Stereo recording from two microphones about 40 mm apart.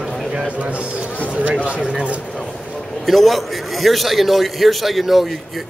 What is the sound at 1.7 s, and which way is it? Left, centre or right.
Speech, right.